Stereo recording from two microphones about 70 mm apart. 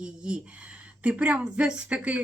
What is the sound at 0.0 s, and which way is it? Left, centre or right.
Speech, centre.